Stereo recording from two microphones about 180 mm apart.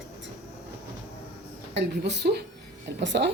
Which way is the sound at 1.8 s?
70° right (ahead or behind).